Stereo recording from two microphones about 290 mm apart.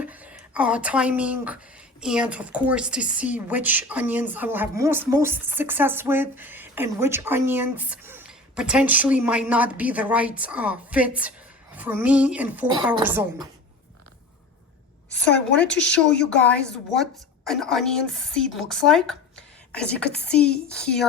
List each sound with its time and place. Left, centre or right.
0.0 s a woman's voice: centre
12.6 s a woman's voice: centre
15.1 s a woman's voice: centre